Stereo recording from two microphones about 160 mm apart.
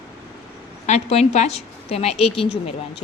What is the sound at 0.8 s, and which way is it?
A woman's voice, 45° left (ahead or behind).